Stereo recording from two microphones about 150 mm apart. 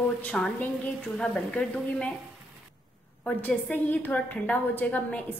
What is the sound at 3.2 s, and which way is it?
A woman's voice, 10° left (ahead or behind).